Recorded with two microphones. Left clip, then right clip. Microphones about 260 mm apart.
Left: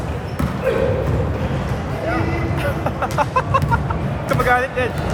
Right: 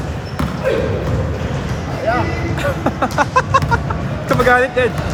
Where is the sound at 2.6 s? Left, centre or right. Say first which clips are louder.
Right 6 dB; right.